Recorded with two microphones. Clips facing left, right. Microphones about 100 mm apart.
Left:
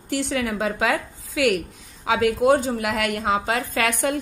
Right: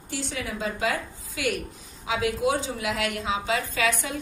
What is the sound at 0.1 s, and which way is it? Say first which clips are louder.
A woman's voice: left 8 dB; 65° left (ahead or behind).